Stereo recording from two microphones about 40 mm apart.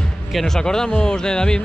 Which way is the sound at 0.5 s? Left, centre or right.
Centre.